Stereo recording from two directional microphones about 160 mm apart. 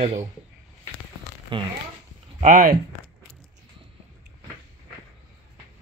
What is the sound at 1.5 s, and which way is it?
Speech, 30° right (ahead or behind).